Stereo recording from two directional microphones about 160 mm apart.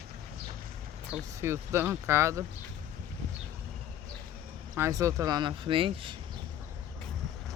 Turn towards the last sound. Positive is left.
turn(degrees=-35)  # may be behind; listen again after turning